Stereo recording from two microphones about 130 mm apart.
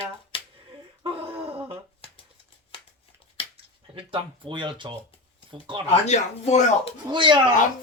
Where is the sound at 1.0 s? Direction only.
45° right (ahead or behind).